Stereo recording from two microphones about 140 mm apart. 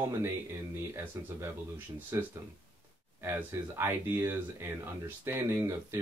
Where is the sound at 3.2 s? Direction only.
15° right (ahead or behind).